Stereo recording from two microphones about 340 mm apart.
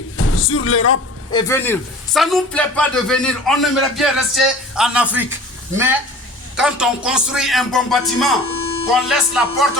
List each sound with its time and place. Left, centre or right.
0.2 s speech: left
1.3 s speech: centre